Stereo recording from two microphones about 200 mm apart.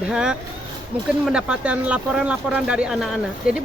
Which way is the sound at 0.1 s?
5° right (ahead or behind).